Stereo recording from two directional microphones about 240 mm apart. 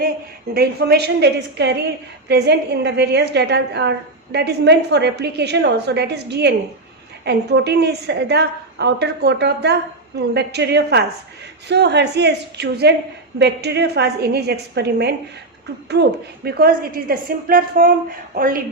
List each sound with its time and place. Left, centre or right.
0.5 s a woman's voice: right